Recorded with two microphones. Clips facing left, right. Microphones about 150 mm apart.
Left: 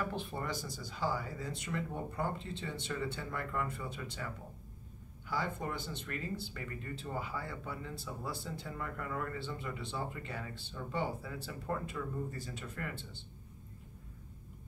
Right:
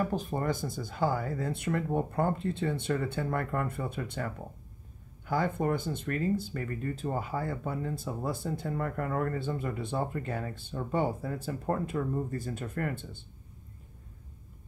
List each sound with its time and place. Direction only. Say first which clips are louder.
0.0 s speech: right 8 dB; 40° right (ahead or behind)